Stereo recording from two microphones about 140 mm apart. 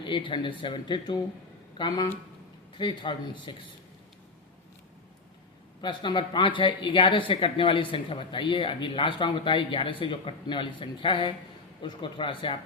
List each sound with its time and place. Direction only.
0.0 s speech: 35° left (ahead or behind)
5.8 s speech: 35° left (ahead or behind)